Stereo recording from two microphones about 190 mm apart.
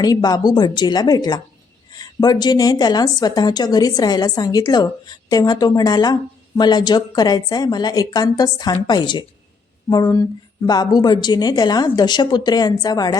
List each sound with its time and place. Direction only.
0.0 s a woman's voice: 20° left (ahead or behind)